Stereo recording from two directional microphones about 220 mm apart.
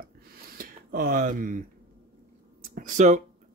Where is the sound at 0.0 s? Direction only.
40° right (ahead or behind).